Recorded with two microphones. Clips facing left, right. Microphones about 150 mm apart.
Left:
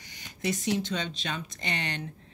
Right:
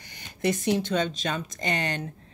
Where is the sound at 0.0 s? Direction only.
55° right (ahead or behind).